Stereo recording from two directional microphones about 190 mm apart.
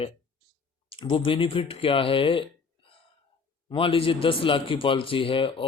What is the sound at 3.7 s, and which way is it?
A man's voice, 30° left (ahead or behind).